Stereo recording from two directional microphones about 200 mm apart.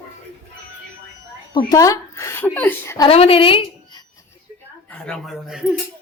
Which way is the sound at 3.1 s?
30° left (ahead or behind).